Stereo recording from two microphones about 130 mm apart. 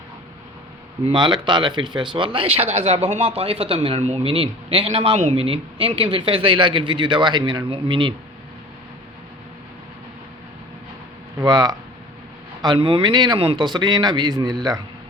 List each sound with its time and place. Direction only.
1.1 s a man's voice: 35° right (ahead or behind)
11.3 s speech: 30° right (ahead or behind)